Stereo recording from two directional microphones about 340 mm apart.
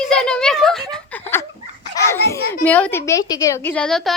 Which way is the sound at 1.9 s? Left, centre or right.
Centre.